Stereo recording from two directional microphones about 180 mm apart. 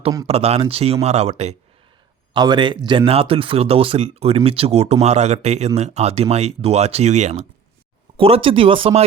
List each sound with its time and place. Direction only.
0.3 s speech: 35° right (ahead or behind)
2.3 s speech: 25° right (ahead or behind)